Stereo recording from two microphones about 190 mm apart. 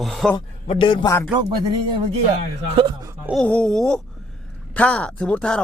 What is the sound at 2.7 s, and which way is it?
Speech, 25° right (ahead or behind).